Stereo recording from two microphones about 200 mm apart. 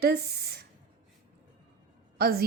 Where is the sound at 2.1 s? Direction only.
50° right (ahead or behind).